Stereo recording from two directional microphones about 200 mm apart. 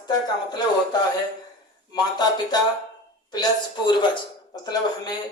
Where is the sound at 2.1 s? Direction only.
20° left (ahead or behind).